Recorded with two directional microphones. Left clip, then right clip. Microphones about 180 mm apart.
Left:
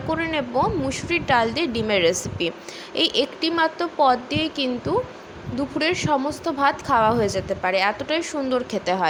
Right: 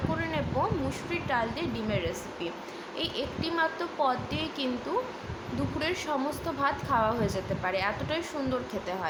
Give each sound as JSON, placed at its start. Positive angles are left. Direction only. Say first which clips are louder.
{"t": 0.2, "sound": "a woman's voice", "louder": "left 9 dB", "side_deg": 35}